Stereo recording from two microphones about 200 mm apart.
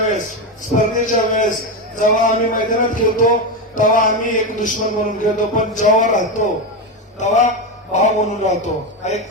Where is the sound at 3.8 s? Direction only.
40° left (ahead or behind).